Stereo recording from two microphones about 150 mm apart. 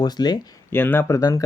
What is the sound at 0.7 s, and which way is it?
Speech, 15° left (ahead or behind).